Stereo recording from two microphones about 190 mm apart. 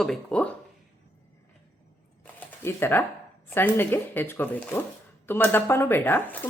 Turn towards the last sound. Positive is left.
turn(degrees=10)  # may be behind; listen again after turning